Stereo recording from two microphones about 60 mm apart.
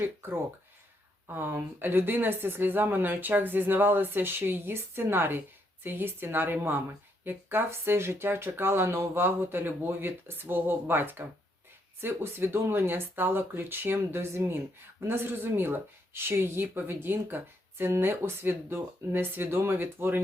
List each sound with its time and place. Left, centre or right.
0.0 s speech: right